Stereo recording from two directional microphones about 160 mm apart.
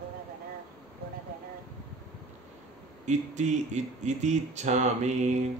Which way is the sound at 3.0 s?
45° right (ahead or behind).